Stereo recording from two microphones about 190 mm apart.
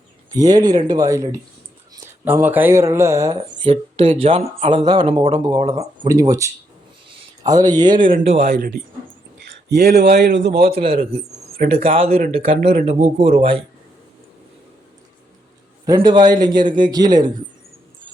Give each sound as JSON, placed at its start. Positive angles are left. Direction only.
{"t": 0.3, "sound": "speech", "side_deg": -20}
{"t": 3.6, "sound": "speech", "side_deg": -30}
{"t": 6.1, "sound": "speech", "side_deg": -15}
{"t": 8.0, "sound": "speech", "side_deg": -55}
{"t": 10.7, "sound": "a man's voice", "side_deg": -30}
{"t": 15.9, "sound": "speech", "side_deg": -25}